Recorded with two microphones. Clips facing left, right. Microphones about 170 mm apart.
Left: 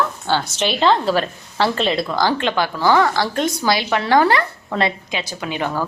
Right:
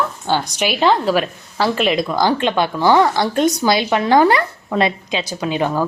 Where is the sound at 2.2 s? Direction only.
20° right (ahead or behind).